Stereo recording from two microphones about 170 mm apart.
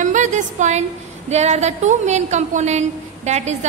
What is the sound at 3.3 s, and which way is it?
Speech, 40° right (ahead or behind).